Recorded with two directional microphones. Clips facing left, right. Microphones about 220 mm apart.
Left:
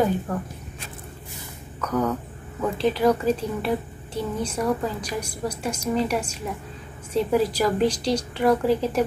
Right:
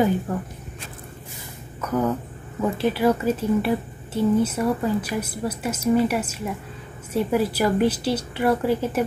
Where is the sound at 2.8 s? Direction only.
5° right (ahead or behind).